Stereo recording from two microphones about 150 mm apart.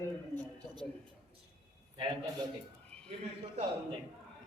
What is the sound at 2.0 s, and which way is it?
Speech, 35° right (ahead or behind).